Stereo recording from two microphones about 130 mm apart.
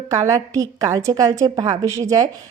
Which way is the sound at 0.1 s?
25° right (ahead or behind).